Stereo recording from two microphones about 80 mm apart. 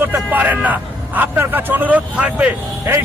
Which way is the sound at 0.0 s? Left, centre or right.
Right.